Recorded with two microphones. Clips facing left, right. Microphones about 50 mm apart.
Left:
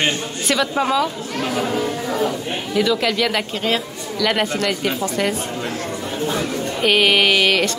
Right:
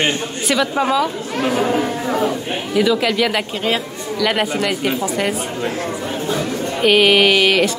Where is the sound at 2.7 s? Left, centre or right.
Centre.